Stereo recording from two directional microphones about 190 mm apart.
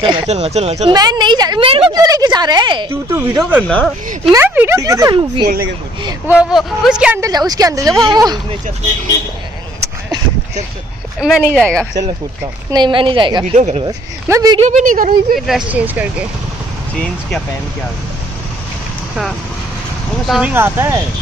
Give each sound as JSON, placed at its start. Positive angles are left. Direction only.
{"t": 0.0, "sound": "speech", "side_deg": -25}
{"t": 0.9, "sound": "a woman's voice", "side_deg": -20}
{"t": 2.9, "sound": "speech", "side_deg": -15}
{"t": 3.6, "sound": "speech", "side_deg": 5}
{"t": 4.3, "sound": "speech", "side_deg": -10}
{"t": 6.2, "sound": "speech", "side_deg": -5}
{"t": 7.2, "sound": "a woman's voice", "side_deg": -20}
{"t": 11.1, "sound": "speech", "side_deg": 0}
{"t": 12.7, "sound": "a woman's voice", "side_deg": -25}
{"t": 13.6, "sound": "speech", "side_deg": -35}
{"t": 13.8, "sound": "a woman's voice", "side_deg": -20}
{"t": 14.6, "sound": "speech", "side_deg": -40}
{"t": 15.4, "sound": "speech", "side_deg": -5}
{"t": 20.2, "sound": "speech", "side_deg": -5}